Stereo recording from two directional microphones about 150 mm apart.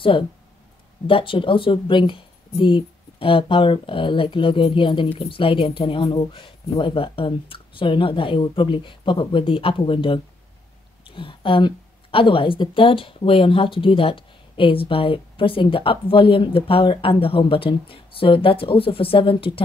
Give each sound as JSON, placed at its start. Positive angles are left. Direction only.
{"t": 1.0, "sound": "a woman's voice", "side_deg": 35}